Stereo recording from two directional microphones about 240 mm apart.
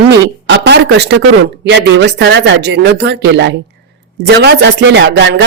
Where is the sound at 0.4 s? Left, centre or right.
Right.